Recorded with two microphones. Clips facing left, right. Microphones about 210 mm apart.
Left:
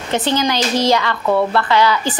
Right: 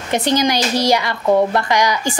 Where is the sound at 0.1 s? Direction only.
15° right (ahead or behind).